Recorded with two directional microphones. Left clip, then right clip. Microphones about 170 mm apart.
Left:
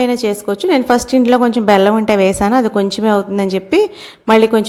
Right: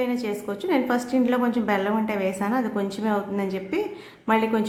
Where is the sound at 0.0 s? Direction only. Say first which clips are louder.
Left 11 dB; 40° left (ahead or behind).